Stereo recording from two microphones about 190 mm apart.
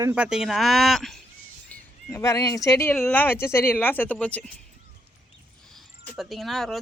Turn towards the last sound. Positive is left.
turn(degrees=0)  # may be behind; listen again after turning